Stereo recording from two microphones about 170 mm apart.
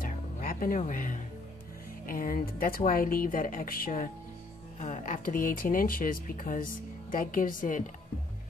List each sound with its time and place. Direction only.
0.0 s music: 55° left (ahead or behind)
2.0 s speech: 55° left (ahead or behind)